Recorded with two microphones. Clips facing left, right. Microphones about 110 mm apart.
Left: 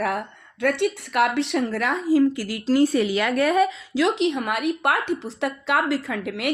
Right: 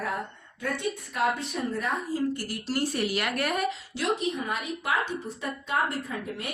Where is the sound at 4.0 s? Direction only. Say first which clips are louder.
Left 7 dB; 90° left.